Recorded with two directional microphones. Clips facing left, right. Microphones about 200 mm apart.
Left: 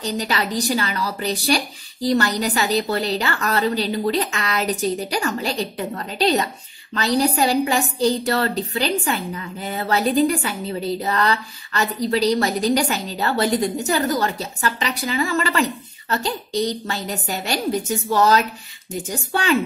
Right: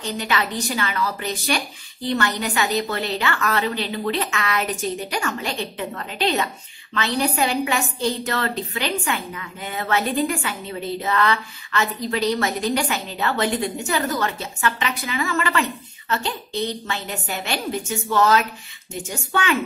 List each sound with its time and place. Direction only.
0.0 s a woman's voice: 35° left (ahead or behind)